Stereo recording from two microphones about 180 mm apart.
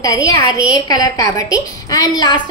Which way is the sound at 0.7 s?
20° left (ahead or behind).